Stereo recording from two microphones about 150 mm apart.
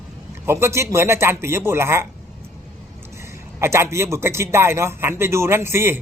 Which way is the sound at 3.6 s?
15° right (ahead or behind).